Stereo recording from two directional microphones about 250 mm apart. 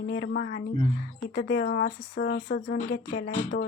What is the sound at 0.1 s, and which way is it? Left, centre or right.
A woman's voice, left.